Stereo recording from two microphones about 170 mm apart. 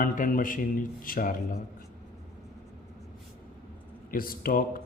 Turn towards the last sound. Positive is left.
turn(degrees=55)  # may be behind; listen again after turning